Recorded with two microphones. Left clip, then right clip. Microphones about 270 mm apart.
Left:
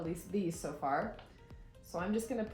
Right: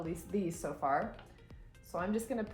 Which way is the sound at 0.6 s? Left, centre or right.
Centre.